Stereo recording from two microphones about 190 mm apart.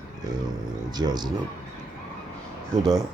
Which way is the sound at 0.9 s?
20° right (ahead or behind).